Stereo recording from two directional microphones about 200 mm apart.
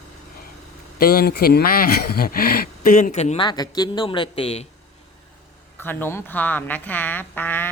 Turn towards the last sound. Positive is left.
turn(degrees=10)  # may be behind; listen again after turning